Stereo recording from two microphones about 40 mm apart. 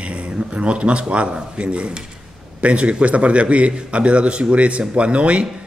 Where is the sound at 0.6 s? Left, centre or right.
Right.